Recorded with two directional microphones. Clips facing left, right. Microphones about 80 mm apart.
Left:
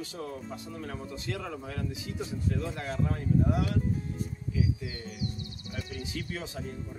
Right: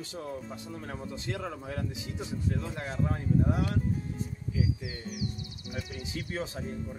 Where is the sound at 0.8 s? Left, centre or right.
Centre.